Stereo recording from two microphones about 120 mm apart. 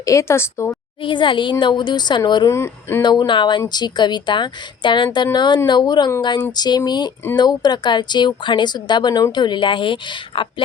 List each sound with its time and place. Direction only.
0.0 s a woman's voice: 25° left (ahead or behind)
1.0 s a woman's voice: 45° left (ahead or behind)
2.5 s a woman's voice: 20° left (ahead or behind)
3.0 s a woman's voice: 40° left (ahead or behind)